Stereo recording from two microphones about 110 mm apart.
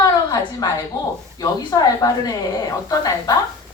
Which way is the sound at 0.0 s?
35° left (ahead or behind).